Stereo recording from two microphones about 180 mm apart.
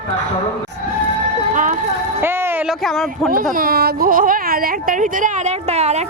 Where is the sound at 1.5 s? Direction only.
45° right (ahead or behind).